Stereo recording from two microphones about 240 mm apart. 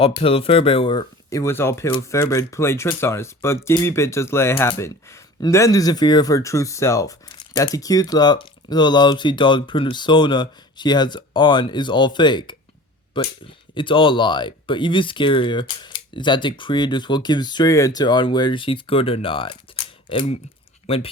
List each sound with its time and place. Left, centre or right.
0.2 s speech: left